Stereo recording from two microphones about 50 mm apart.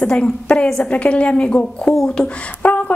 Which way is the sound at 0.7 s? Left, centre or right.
Left.